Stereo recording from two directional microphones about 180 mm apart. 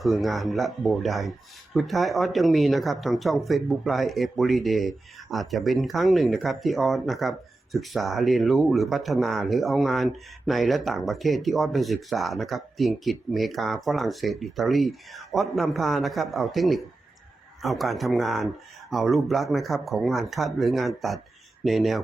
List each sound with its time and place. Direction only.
0.0 s speech: centre (ahead or behind)